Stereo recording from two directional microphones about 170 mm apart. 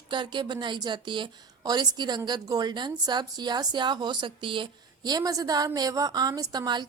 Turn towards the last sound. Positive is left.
turn(degrees=-25)  # may be behind; listen again after turning